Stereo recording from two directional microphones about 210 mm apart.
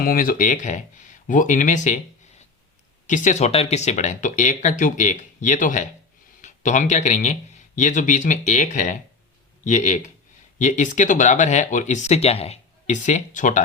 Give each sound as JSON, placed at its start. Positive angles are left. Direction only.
{"t": 0.0, "sound": "speech", "side_deg": 45}
{"t": 3.1, "sound": "speech", "side_deg": 35}